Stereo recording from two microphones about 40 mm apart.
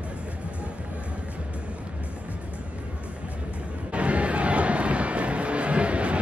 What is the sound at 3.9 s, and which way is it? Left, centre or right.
Music, right.